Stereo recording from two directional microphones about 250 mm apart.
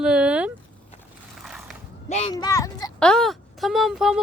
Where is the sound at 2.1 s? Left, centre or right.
Left.